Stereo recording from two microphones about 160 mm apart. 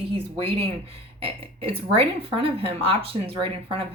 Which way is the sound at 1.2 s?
35° right (ahead or behind).